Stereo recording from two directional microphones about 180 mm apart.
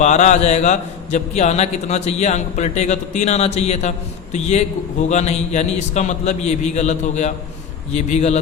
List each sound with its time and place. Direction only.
0.0 s a man's voice: 40° left (ahead or behind)